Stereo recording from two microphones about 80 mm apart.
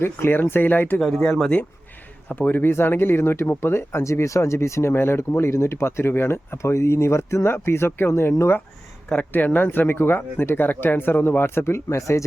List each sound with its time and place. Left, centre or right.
0.0 s speech: left
0.9 s speech: centre; by 12.2 s left